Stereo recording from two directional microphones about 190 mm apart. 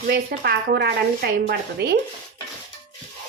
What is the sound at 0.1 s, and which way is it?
Speech, 55° right (ahead or behind).